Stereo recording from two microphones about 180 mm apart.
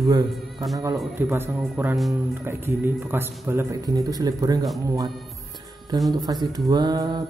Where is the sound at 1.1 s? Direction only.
10° right (ahead or behind).